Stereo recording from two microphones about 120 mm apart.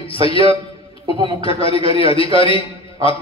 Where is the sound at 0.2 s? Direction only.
50° left (ahead or behind).